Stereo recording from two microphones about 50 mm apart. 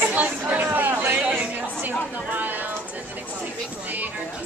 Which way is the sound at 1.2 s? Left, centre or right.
Right.